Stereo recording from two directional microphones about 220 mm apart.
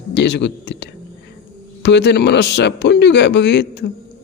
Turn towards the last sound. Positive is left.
turn(degrees=50)  # may be behind; listen again after turning